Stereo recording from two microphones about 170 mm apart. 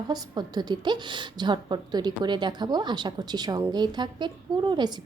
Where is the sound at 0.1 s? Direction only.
25° right (ahead or behind).